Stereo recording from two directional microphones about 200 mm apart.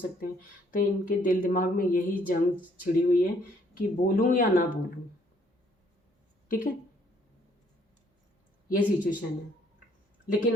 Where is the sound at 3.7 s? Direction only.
40° left (ahead or behind).